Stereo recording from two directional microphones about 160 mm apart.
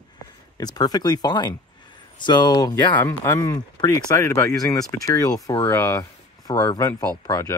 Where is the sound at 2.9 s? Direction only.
15° left (ahead or behind).